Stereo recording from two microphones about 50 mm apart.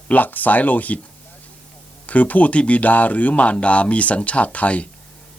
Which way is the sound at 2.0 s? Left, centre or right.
Left.